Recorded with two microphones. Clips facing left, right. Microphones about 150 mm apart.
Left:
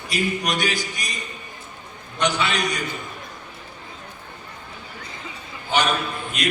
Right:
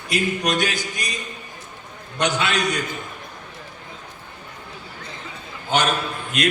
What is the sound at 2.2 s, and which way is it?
Speech, 50° right (ahead or behind).